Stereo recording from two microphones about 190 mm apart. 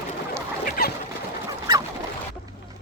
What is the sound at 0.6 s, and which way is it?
Chicken, 50° left (ahead or behind).